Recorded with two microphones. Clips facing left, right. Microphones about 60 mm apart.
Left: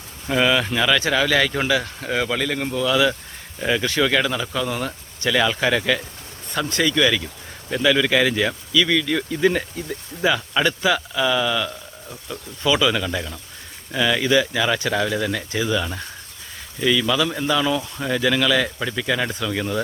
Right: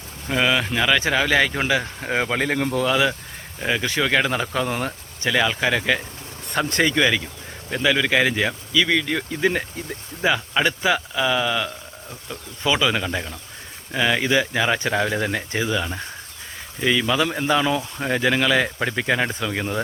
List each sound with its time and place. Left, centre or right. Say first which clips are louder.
0.3 s speech: left 2 dB; centre; by 2.6 s right
2.6 s speech: right 2 dB; right
3.6 s speech: left 2 dB; centre
4.3 s speech: right 1 dB; right
4.9 s speech: left 1 dB; centre
6.5 s speech: right 1 dB; right
7.7 s speech: left 2 dB; centre
15.7 s speech: left 1 dB; centre
18.8 s speech: right 1 dB; right